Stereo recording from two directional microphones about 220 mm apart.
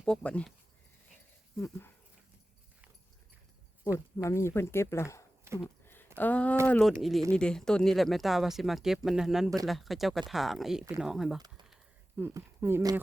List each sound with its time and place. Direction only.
0.0 s speech: 5° left (ahead or behind)
3.9 s speech: 15° left (ahead or behind)
5.6 s a sound: 10° left (ahead or behind)
6.1 s speech: 5° left (ahead or behind)
11.3 s speech: 20° right (ahead or behind)
11.7 s a sound: 10° right (ahead or behind)